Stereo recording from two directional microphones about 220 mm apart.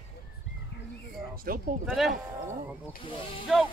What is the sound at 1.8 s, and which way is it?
Speech, centre (ahead or behind).